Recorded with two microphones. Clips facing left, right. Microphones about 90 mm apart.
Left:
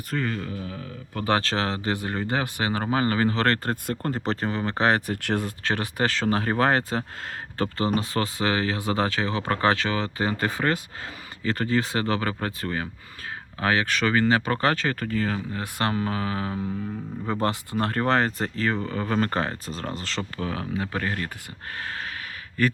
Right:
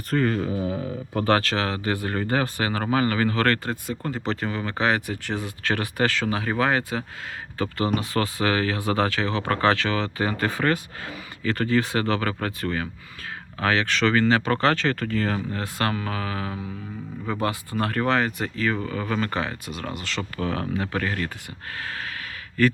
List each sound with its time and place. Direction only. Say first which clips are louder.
0.1 s speech: right 6 dB; 5° right (ahead or behind)
0.5 s speech: right 8 dB; 20° right (ahead or behind)
1.4 s speech: right 1 dB; 30° left (ahead or behind)
3.6 s speech: left 1 dB; 45° left (ahead or behind)
4.3 s speech: even; 35° left (ahead or behind)
5.1 s speech: left 3 dB; 60° left (ahead or behind)
5.6 s speech: right 4 dB; 25° left (ahead or behind)
6.3 s speech: left 1 dB; 40° left (ahead or behind)
20.4 s speech: right 4 dB; 15° left (ahead or behind)
21.0 s speech: right 1 dB; 25° left (ahead or behind)